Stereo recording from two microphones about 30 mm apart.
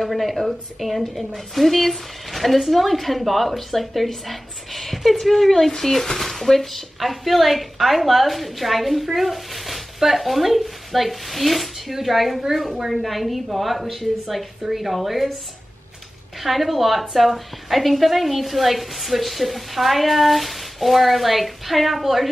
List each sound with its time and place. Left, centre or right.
0.0 s a woman's voice: centre
16.4 s a woman's voice: centre